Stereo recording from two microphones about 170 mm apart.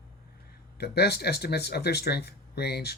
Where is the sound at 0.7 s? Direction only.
70° left (ahead or behind).